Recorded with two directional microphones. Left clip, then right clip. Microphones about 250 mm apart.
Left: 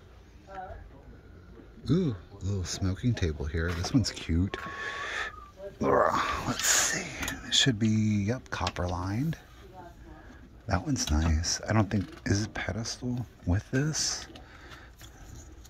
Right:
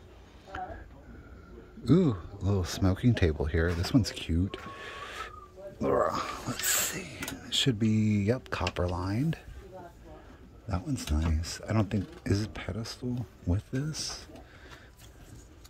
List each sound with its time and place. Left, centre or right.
1.9 s speech: centre
5.8 s speech: centre
10.7 s speech: centre